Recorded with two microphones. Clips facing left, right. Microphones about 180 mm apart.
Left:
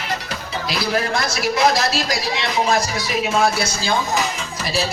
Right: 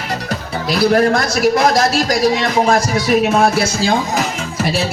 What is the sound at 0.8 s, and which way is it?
A man's voice, 50° right (ahead or behind).